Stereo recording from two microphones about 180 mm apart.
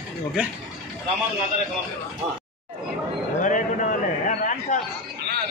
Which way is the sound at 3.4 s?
45° left (ahead or behind).